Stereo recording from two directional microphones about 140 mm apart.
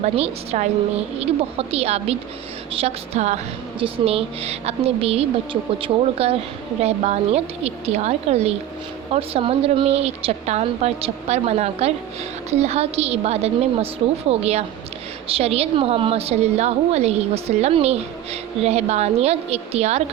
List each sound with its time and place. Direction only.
0.0 s a woman's voice: 50° right (ahead or behind)